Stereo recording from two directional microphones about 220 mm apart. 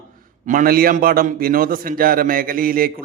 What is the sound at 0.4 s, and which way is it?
A man's voice, 40° right (ahead or behind).